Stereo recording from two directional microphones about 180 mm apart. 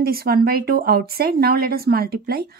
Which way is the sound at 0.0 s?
55° right (ahead or behind).